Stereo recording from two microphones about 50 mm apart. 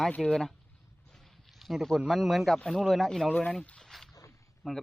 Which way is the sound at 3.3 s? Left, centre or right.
Left.